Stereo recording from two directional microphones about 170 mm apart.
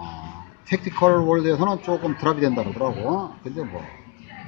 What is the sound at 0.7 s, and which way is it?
A man's voice, 10° right (ahead or behind).